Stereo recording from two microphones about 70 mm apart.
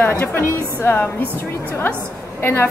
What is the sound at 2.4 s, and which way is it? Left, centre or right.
Speech, left.